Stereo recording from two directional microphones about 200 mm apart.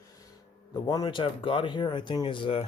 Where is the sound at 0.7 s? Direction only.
20° left (ahead or behind).